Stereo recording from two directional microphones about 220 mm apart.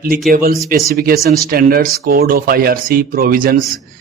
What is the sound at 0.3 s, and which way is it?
A man's voice, 40° right (ahead or behind).